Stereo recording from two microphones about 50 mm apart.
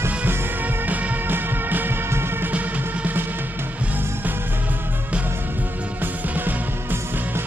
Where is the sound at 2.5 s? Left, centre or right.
Right.